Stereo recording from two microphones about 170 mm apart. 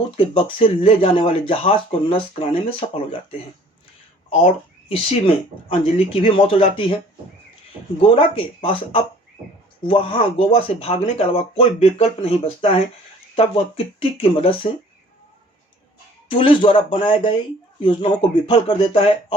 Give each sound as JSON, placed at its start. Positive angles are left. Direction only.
{"t": 0.2, "sound": "speech", "side_deg": 30}
{"t": 4.4, "sound": "speech", "side_deg": 35}
{"t": 8.0, "sound": "speech", "side_deg": 30}
{"t": 16.4, "sound": "speech", "side_deg": 30}